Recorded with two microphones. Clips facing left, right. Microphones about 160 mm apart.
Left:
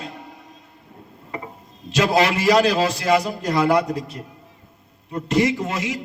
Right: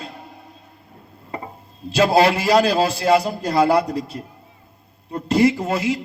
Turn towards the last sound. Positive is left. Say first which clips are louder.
# right 4 dB
turn(degrees=-30)  # may be behind; listen again after turning